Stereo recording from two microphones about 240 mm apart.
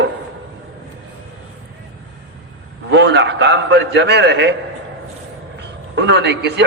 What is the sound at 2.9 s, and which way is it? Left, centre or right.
A man's voice, right.